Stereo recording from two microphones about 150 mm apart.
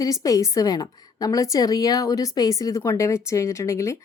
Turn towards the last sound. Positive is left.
turn(degrees=20)  # may be behind; listen again after turning